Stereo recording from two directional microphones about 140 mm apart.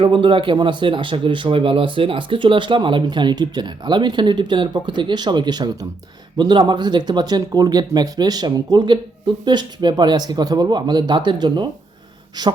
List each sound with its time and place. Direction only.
0.0 s speech: 35° right (ahead or behind)